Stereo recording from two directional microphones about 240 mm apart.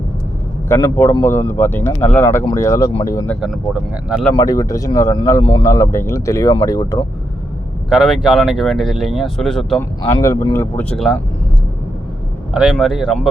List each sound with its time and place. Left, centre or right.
0.7 s speech: centre
3.4 s speech: centre
4.4 s speech: centre
7.9 s speech: centre
10.1 s speech: centre
12.5 s speech: centre